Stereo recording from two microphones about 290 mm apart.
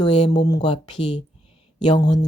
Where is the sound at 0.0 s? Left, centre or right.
Centre.